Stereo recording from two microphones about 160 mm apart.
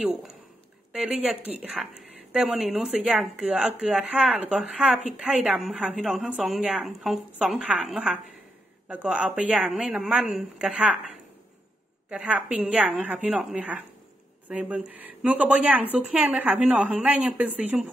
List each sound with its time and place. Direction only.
0.0 s a woman's voice: centre (ahead or behind)
12.1 s a woman's voice: 5° right (ahead or behind)